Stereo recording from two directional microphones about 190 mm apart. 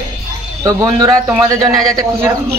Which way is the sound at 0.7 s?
15° right (ahead or behind).